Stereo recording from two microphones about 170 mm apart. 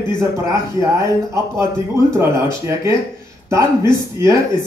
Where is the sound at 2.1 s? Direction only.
20° right (ahead or behind).